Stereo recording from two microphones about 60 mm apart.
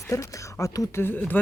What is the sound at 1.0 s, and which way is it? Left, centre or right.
Speech, left.